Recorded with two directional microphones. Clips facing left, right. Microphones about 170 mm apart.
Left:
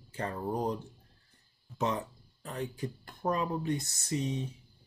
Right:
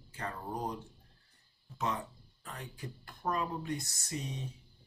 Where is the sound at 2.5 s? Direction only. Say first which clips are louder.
Left 10 dB; 25° left (ahead or behind).